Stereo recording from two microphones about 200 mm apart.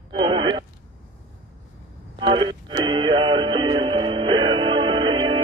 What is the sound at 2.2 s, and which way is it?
Music, 25° right (ahead or behind).